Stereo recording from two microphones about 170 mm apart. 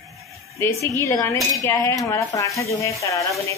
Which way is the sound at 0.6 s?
15° left (ahead or behind).